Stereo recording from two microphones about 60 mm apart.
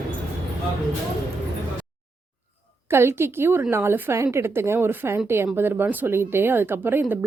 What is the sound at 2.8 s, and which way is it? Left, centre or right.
A woman's voice, right.